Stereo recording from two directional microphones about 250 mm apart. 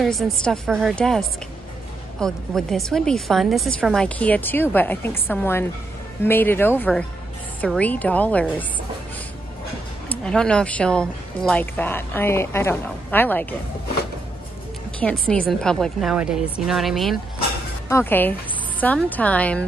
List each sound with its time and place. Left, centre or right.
0.0 s a woman's voice: centre
10.0 s a woman's voice: centre
15.0 s a woman's voice: centre